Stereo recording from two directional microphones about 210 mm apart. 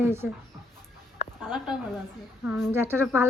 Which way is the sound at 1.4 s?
Centre (ahead or behind).